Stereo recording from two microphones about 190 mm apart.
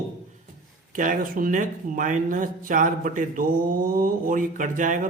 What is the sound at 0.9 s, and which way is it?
Speech, 45° right (ahead or behind).